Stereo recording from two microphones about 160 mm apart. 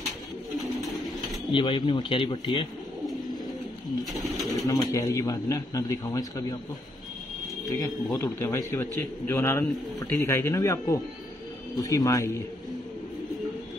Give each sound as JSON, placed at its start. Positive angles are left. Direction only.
{"t": 1.5, "sound": "speech", "side_deg": 30}
{"t": 4.0, "sound": "speech", "side_deg": 0}
{"t": 4.6, "sound": "a man's voice", "side_deg": 20}
{"t": 8.1, "sound": "a man's voice", "side_deg": 15}